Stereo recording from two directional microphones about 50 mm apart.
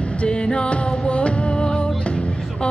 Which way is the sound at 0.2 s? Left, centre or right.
Centre.